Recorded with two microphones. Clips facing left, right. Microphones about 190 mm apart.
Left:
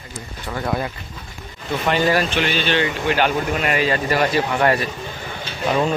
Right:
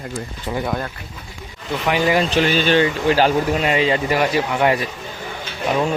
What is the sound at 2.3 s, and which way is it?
Speech, 40° right (ahead or behind).